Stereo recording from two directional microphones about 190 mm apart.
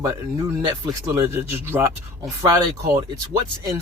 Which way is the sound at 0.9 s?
15° right (ahead or behind).